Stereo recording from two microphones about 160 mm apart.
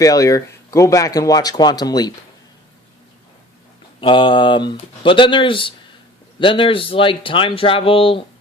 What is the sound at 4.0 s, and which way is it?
Speech, 30° left (ahead or behind).